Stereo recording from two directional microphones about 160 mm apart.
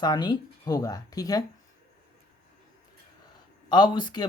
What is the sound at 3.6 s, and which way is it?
Speech, 25° left (ahead or behind).